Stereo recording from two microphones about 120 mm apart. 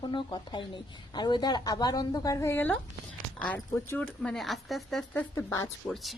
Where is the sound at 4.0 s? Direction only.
5° left (ahead or behind).